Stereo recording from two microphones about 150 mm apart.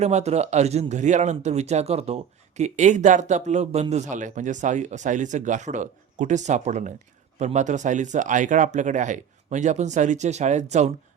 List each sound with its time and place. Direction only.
0.0 s a man's voice: 45° right (ahead or behind)